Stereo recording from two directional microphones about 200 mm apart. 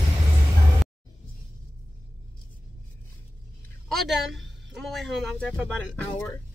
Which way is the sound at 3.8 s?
Centre (ahead or behind).